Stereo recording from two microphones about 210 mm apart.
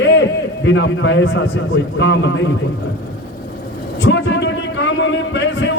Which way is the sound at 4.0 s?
60° left (ahead or behind).